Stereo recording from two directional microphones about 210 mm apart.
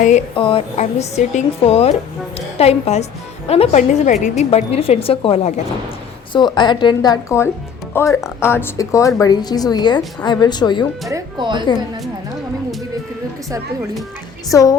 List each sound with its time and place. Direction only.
0.3 s a woman's voice: 25° left (ahead or behind)
11.1 s speech: 20° right (ahead or behind)
14.5 s a woman's voice: 15° left (ahead or behind)